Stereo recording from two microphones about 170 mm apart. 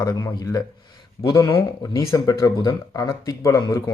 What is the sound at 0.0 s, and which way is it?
Speech, 20° left (ahead or behind).